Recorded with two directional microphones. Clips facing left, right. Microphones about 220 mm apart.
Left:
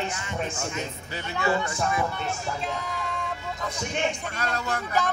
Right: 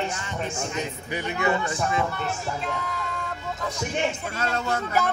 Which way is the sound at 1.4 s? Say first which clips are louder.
Even; 20° right (ahead or behind).